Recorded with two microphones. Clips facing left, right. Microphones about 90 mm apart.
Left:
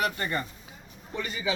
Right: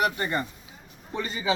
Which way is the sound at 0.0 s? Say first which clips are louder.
Right 3 dB; 20° right (ahead or behind).